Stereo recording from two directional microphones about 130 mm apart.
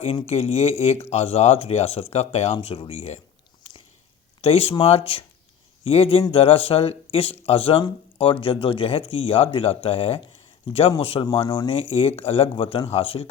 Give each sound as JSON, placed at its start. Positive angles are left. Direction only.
{"t": 0.0, "sound": "speech", "side_deg": 50}
{"t": 4.4, "sound": "speech", "side_deg": 50}
{"t": 11.4, "sound": "speech", "side_deg": 35}